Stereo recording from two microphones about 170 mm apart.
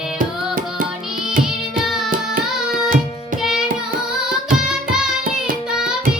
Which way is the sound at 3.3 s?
5° right (ahead or behind).